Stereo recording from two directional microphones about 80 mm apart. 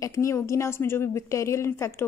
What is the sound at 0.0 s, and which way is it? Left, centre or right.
A woman's voice, left.